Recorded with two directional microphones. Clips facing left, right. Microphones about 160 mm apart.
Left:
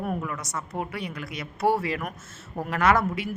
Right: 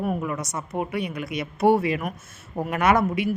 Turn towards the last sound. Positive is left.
turn(degrees=-20)  # may be behind; listen again after turning